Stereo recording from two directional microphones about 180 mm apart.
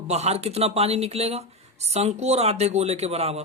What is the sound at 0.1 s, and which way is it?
Speech, 35° right (ahead or behind).